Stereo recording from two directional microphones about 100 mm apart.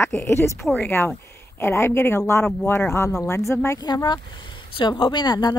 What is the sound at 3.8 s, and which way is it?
Speech, 45° left (ahead or behind).